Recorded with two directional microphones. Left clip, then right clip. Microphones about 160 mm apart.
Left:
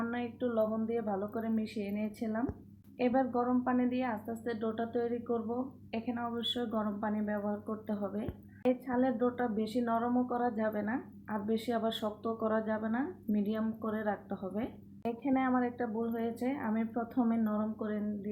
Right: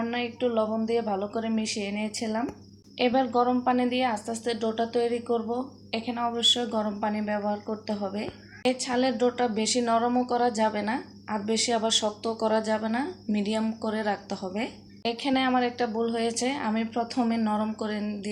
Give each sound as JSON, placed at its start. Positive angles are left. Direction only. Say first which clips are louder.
{"t": 0.0, "sound": "a woman's voice", "louder": "right 8 dB", "side_deg": -15}